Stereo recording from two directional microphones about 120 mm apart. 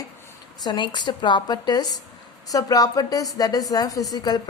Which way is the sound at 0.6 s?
40° left (ahead or behind).